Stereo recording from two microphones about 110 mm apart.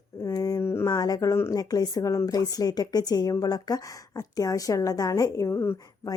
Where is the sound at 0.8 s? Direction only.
35° left (ahead or behind).